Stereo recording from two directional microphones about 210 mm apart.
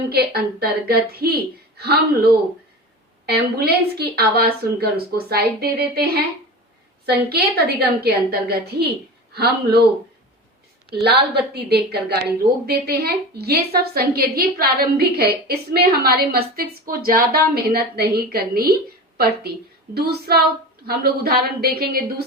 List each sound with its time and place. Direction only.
0.1 s a woman's voice: 50° right (ahead or behind)
3.2 s a woman's voice: 50° right (ahead or behind)
11.0 s a woman's voice: 50° right (ahead or behind)